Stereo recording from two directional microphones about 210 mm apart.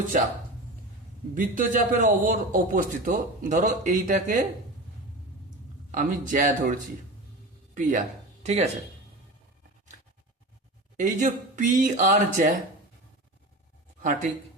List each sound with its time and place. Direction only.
1.4 s a man's voice: 40° right (ahead or behind)
5.9 s a man's voice: 40° right (ahead or behind)
7.8 s a man's voice: 35° right (ahead or behind)
10.9 s a man's voice: 40° right (ahead or behind)
14.0 s speech: 40° right (ahead or behind)